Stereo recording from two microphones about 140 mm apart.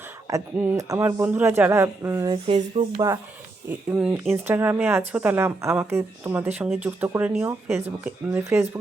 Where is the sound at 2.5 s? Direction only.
50° right (ahead or behind).